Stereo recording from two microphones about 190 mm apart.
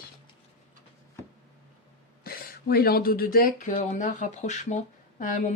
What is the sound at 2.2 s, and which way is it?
Speech, 50° left (ahead or behind).